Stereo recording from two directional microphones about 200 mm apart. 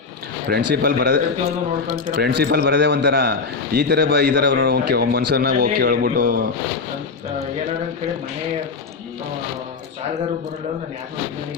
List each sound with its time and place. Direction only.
0.4 s a man's voice: 50° right (ahead or behind)
2.2 s a man's voice: 55° right (ahead or behind)